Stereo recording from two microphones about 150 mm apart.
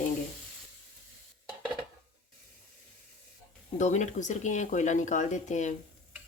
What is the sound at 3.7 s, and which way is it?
Speech, 50° left (ahead or behind).